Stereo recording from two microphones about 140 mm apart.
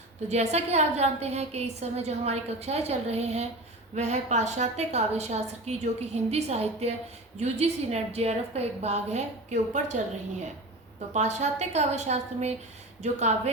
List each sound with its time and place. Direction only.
0.3 s a woman's voice: 50° right (ahead or behind)
11.1 s a woman's voice: 55° right (ahead or behind)